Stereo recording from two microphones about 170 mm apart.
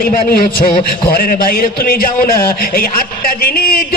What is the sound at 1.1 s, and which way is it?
A man's voice, 55° left (ahead or behind).